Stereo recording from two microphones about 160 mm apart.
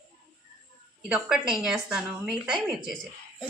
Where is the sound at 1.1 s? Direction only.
5° right (ahead or behind).